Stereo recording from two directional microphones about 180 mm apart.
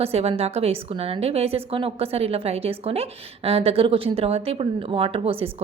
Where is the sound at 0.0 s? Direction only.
35° right (ahead or behind).